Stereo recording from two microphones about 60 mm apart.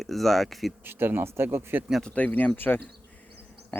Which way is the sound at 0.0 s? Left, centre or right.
Centre.